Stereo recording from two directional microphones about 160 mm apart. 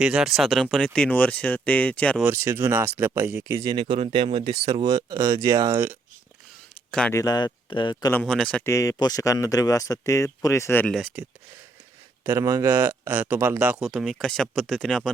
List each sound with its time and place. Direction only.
0.0 s speech: 5° right (ahead or behind)
2.2 s speech: 15° right (ahead or behind)
3.6 s speech: 30° right (ahead or behind)
7.1 s speech: 20° left (ahead or behind)
8.1 s speech: 5° left (ahead or behind)
8.6 s speech: 20° left (ahead or behind)
10.9 s speech: 5° right (ahead or behind)
12.2 s speech: 20° right (ahead or behind); by 15.1 s centre (ahead or behind)